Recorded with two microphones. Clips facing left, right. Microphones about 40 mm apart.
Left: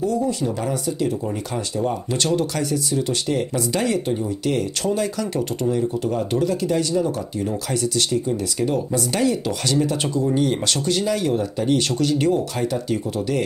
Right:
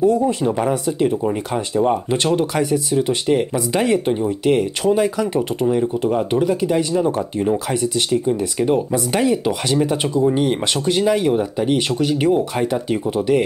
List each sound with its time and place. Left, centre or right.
0.0 s speech: right